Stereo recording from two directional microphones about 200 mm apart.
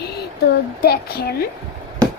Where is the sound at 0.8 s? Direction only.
50° left (ahead or behind).